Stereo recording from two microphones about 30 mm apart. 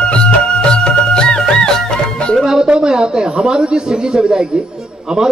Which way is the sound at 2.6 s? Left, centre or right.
Right.